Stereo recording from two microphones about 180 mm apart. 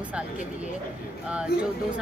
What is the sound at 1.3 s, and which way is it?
Speech, 5° right (ahead or behind).